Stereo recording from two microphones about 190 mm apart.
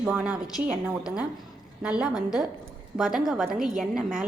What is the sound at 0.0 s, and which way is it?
Speech, 5° right (ahead or behind).